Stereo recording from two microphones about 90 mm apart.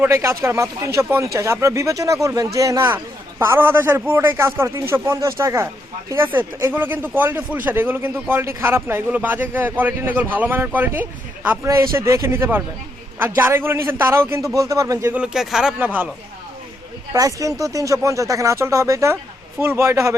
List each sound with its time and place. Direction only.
0.0 s a man's voice: 35° right (ahead or behind)
6.7 s a man's voice: 20° right (ahead or behind)
11.6 s a man's voice: 35° right (ahead or behind)
15.1 s speech: 10° right (ahead or behind)
15.8 s a man's voice: 20° right (ahead or behind)
17.2 s speech: 40° right (ahead or behind)